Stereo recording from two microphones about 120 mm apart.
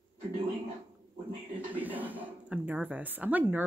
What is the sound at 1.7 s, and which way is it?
A woman's voice, 15° right (ahead or behind).